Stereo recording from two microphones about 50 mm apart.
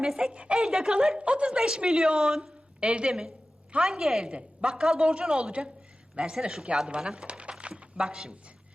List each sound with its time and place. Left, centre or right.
0.0 s a woman's voice: centre
3.1 s a woman's voice: centre
7.3 s a sound: right